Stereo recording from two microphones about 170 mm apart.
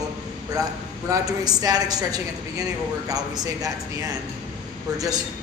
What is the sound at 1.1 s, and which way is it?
A woman's voice, 20° right (ahead or behind).